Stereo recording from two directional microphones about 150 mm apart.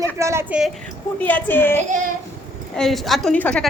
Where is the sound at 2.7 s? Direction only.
Centre (ahead or behind).